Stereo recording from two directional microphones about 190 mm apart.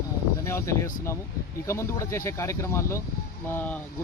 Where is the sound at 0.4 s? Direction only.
15° left (ahead or behind).